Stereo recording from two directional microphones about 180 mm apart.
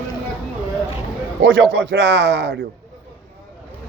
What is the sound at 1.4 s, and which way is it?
Speech, 90° right.